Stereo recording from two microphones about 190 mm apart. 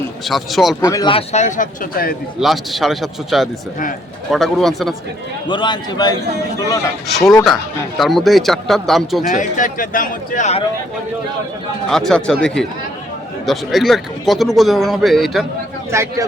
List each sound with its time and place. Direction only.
0.3 s a man's voice: centre (ahead or behind)
0.8 s speech: 15° left (ahead or behind)
1.1 s a man's voice: 35° left (ahead or behind)
2.4 s a man's voice: centre (ahead or behind)
5.5 s a man's voice: 25° left (ahead or behind)
7.4 s a man's voice: centre (ahead or behind)
9.3 s a man's voice: 45° left (ahead or behind)
11.9 s a man's voice: centre (ahead or behind)
15.9 s speech: 15° right (ahead or behind)